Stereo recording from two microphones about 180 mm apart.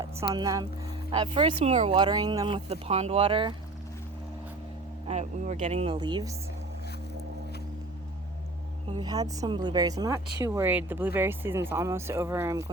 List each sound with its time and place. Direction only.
0.3 s speech: 20° right (ahead or behind)
5.0 s speech: 40° right (ahead or behind)
8.9 s speech: 20° right (ahead or behind)